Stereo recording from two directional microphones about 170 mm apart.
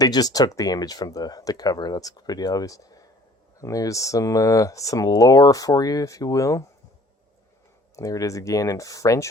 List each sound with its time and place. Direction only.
0.0 s speech: 20° left (ahead or behind)
7.9 s speech: 20° left (ahead or behind)